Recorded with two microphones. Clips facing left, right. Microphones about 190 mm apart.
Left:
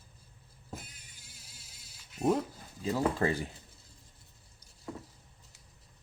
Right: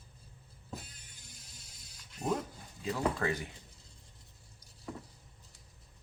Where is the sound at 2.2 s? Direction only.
5° left (ahead or behind).